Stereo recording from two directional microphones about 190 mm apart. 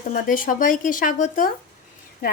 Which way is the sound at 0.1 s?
45° left (ahead or behind).